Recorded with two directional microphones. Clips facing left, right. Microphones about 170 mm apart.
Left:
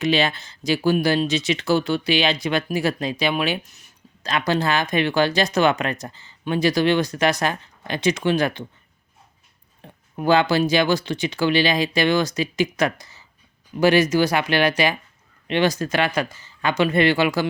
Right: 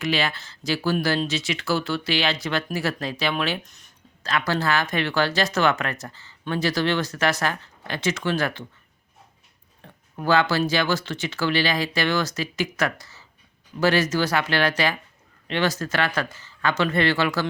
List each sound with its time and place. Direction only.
0.0 s speech: 20° left (ahead or behind); by 3.9 s 5° left (ahead or behind)
4.2 s speech: 15° left (ahead or behind)
9.8 s speech: 15° left (ahead or behind)